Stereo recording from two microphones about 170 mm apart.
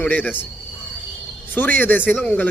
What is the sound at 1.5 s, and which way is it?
Speech, 10° left (ahead or behind).